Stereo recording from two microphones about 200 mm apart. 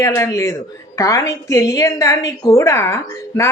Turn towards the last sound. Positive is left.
turn(degrees=15)  # may be behind; listen again after turning